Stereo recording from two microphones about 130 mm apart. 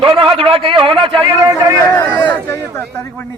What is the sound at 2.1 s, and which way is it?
Speech, 20° left (ahead or behind).